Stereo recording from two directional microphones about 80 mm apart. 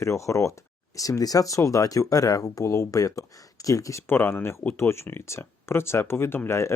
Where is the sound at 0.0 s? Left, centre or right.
Left.